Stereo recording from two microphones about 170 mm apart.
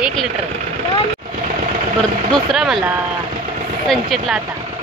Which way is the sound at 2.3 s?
Centre (ahead or behind).